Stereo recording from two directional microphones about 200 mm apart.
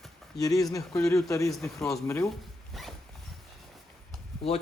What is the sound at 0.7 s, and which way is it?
Speech, 15° left (ahead or behind).